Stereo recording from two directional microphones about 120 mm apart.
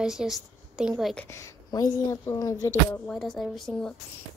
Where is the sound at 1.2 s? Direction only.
25° left (ahead or behind).